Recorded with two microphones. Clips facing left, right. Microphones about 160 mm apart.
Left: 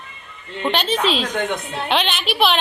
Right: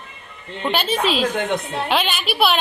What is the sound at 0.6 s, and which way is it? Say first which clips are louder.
A woman's voice: left 1 dB; 5° right (ahead or behind).